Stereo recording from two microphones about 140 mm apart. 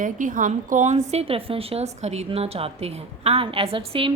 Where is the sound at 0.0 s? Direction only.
70° right (ahead or behind).